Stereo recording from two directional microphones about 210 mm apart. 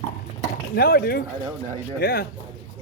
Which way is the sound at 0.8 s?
45° left (ahead or behind).